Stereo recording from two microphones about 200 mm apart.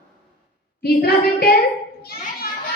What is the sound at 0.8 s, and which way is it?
Speech, 50° left (ahead or behind).